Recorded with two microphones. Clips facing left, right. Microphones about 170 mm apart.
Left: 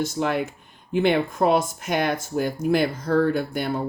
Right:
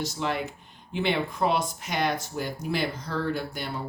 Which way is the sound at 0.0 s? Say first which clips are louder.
Left 6 dB; 50° left (ahead or behind).